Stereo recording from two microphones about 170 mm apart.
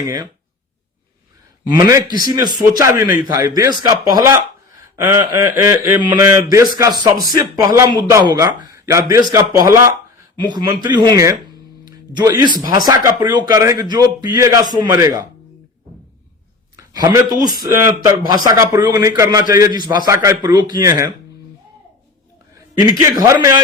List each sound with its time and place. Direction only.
1.6 s a man's voice: 20° right (ahead or behind)
16.7 s a sound: 20° right (ahead or behind)
17.6 s a man's voice: 15° right (ahead or behind)
22.8 s a man's voice: 20° right (ahead or behind)